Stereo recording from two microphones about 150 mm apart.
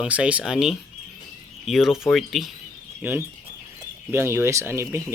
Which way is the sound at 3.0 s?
15° right (ahead or behind).